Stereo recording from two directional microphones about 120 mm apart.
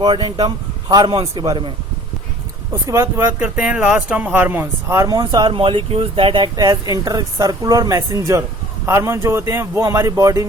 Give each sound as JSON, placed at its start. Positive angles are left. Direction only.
{"t": 0.0, "sound": "speech", "side_deg": -40}
{"t": 2.8, "sound": "speech", "side_deg": -25}
{"t": 5.5, "sound": "speech", "side_deg": -50}